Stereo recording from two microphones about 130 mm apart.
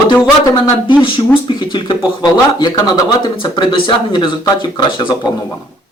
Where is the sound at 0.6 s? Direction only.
40° left (ahead or behind).